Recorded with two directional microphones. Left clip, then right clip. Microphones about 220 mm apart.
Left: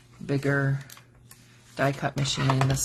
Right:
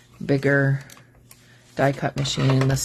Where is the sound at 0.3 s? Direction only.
35° right (ahead or behind).